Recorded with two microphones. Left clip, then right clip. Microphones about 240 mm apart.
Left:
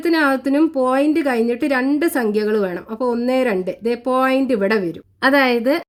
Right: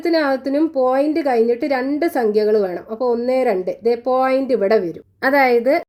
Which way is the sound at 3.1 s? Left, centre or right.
Left.